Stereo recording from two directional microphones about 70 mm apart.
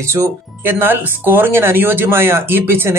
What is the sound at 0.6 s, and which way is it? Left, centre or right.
Speech, right.